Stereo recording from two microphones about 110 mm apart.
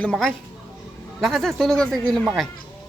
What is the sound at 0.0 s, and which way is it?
A man's voice, 5° left (ahead or behind).